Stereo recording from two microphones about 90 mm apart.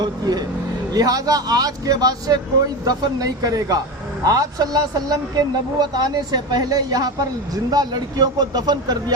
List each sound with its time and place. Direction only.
0.0 s speech: 50° right (ahead or behind)